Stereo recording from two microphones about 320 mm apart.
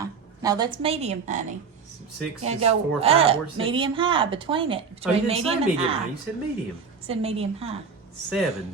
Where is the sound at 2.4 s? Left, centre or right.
Centre.